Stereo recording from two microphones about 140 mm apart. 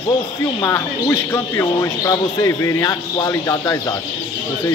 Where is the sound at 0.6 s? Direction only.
20° left (ahead or behind).